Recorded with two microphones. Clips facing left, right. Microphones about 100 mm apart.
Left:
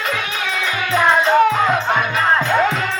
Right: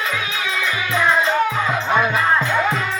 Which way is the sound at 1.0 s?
65° left (ahead or behind).